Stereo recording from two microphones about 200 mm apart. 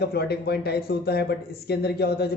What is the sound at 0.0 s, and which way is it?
A man's voice, 55° left (ahead or behind).